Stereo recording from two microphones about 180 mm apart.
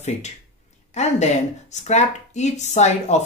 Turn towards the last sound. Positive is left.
turn(degrees=40)  # may be behind; listen again after turning